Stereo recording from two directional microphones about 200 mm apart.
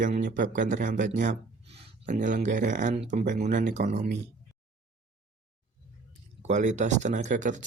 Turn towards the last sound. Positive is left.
turn(degrees=-40)  # may be behind; listen again after turning